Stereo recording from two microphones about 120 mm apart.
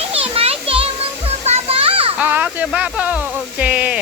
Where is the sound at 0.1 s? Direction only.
55° right (ahead or behind).